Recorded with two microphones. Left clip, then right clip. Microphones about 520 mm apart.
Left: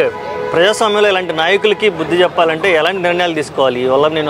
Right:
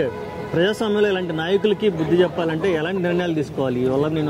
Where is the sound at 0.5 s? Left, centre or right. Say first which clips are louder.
Left 8 dB; left.